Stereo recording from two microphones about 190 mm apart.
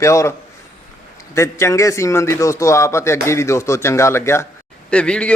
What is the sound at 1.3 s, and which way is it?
A man's voice, 15° left (ahead or behind).